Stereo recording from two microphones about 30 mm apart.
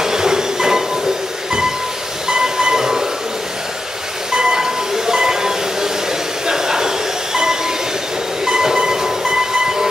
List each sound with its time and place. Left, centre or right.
0.0 s train: right
2.2 s train: right
4.3 s train: right
6.4 s a sound: centre
8.5 s train: right